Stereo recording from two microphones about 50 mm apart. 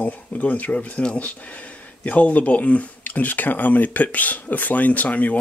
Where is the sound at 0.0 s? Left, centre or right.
Left.